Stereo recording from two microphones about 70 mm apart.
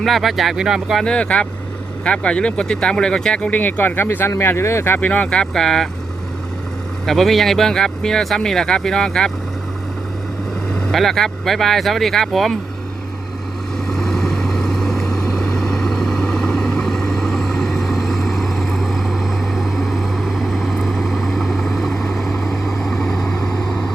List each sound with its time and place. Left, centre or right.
0.0 s speech: centre
1.0 s speech: centre; by 4.9 s left
4.9 s speech: left
7.0 s speech: centre
10.9 s speech: centre
13.7 s vehicle: centre